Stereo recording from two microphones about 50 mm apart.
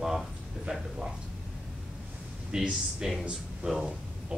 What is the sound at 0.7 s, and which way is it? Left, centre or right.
Speech, right.